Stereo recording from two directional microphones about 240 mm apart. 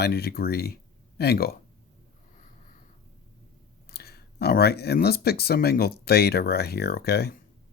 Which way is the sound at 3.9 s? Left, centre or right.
Left.